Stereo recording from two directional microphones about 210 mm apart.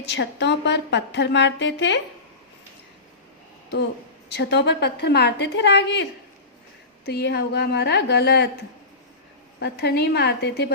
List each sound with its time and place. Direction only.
0.0 s a woman's voice: 55° left (ahead or behind)
4.3 s a woman's voice: 55° left (ahead or behind)
9.6 s a woman's voice: 50° left (ahead or behind)